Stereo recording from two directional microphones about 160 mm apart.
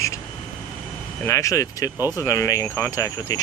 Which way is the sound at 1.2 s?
20° left (ahead or behind).